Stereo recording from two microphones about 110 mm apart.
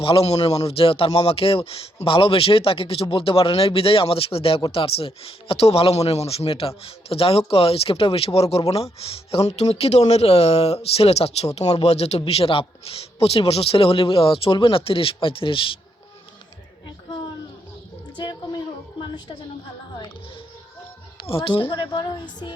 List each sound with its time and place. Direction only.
0.0 s a man's voice: 60° left (ahead or behind)
9.6 s a man's voice: 75° left (ahead or behind); by 15.7 s 50° left (ahead or behind)
21.2 s a man's voice: 50° left (ahead or behind)